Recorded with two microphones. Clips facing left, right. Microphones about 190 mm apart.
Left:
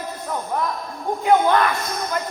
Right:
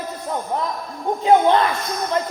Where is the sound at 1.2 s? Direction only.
25° right (ahead or behind).